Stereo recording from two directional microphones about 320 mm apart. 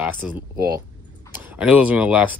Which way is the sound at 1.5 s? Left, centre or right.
Centre.